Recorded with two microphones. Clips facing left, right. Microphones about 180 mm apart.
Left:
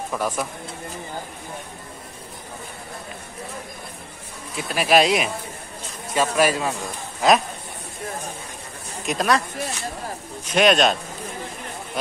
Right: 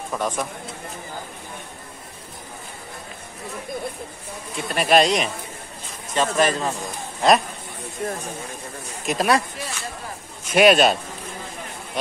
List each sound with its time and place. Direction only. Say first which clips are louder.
0.1 s speech: right 1 dB; 5° left (ahead or behind)
4.6 s speech: even; centre (ahead or behind)
9.0 s speech: right 1 dB; 5° right (ahead or behind)
10.5 s speech: right 2 dB; 5° right (ahead or behind)